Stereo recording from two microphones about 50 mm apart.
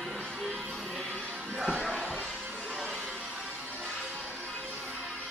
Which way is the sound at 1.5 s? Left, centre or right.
Centre.